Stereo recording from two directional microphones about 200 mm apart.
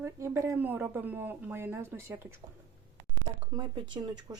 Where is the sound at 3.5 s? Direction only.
20° right (ahead or behind).